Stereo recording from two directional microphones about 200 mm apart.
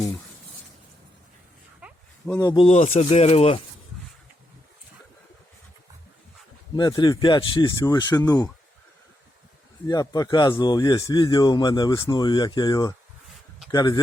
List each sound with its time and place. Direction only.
1.8 s a sound: 5° right (ahead or behind)
2.2 s speech: 15° left (ahead or behind)
2.6 s speech: 35° left (ahead or behind)
6.7 s speech: 20° left (ahead or behind)
9.8 s speech: 20° left (ahead or behind)